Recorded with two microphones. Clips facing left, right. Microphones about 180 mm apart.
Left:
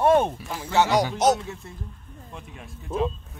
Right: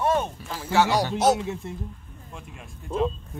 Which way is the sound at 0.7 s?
20° left (ahead or behind).